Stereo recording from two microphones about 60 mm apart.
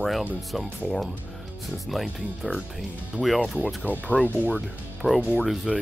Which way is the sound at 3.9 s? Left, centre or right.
Left.